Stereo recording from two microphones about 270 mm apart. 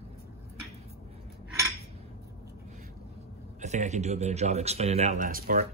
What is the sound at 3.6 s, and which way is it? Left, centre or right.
Speech, right.